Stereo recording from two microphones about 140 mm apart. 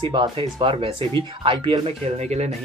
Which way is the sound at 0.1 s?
35° right (ahead or behind).